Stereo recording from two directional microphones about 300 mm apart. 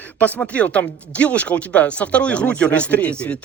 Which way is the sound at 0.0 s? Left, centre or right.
Centre.